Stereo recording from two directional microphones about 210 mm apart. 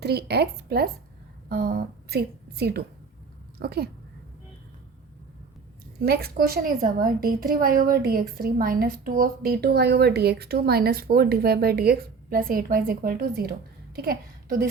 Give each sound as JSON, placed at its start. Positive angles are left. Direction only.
{"t": 0.0, "sound": "a woman's voice", "side_deg": -50}
{"t": 6.1, "sound": "a woman's voice", "side_deg": -45}